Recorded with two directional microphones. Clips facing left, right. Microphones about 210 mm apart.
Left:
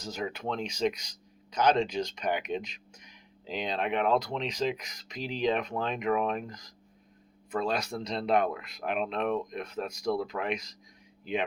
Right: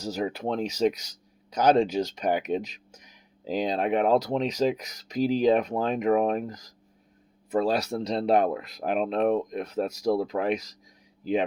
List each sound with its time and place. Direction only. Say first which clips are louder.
0.0 s speech: right 6 dB; 35° right (ahead or behind)